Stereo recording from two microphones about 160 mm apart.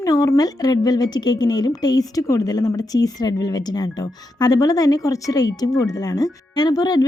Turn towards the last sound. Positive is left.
turn(degrees=25)  # may be behind; listen again after turning